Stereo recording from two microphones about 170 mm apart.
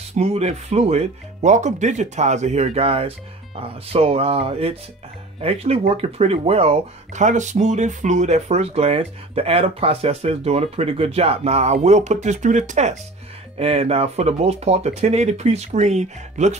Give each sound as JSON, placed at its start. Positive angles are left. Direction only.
{"t": 0.1, "sound": "speech", "side_deg": -40}